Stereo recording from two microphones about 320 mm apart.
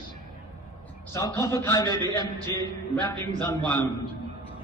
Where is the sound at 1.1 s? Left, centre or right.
Centre.